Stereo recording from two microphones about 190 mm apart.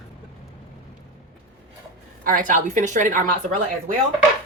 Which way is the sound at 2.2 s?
45° right (ahead or behind).